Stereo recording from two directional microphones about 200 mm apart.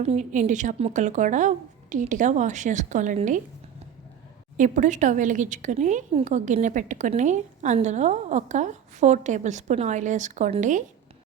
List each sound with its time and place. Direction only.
0.0 s a woman's voice: 35° right (ahead or behind)
4.5 s a woman's voice: 40° right (ahead or behind)